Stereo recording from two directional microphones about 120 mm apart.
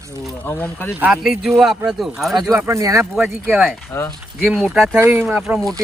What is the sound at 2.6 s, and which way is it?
Speech, 25° right (ahead or behind).